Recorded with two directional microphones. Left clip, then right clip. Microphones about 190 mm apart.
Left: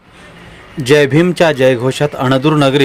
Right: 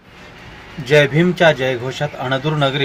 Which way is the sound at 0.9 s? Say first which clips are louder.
Left 4 dB; 55° left (ahead or behind).